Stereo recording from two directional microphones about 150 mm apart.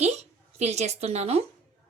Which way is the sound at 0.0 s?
45° right (ahead or behind).